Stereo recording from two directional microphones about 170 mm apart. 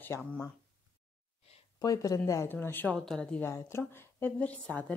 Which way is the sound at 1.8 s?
20° left (ahead or behind).